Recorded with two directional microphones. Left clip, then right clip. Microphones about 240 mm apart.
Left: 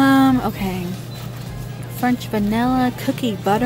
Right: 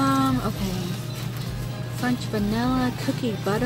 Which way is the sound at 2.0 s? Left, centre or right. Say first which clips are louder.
Left 6 dB; centre.